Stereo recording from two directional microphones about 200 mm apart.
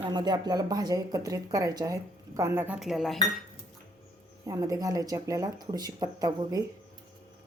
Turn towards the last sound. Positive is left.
turn(degrees=-20)  # may be behind; listen again after turning